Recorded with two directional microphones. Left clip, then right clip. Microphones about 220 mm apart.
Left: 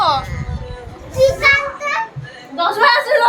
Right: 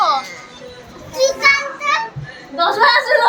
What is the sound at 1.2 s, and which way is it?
Children playing, centre (ahead or behind).